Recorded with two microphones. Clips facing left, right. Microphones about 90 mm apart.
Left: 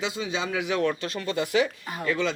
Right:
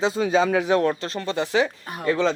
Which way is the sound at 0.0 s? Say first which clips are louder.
Right 9 dB; 40° right (ahead or behind).